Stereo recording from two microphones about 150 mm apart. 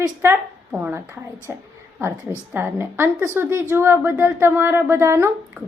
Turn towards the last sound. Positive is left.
turn(degrees=-15)  # may be behind; listen again after turning